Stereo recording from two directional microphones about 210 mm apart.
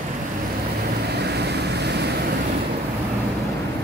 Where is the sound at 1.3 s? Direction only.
55° right (ahead or behind).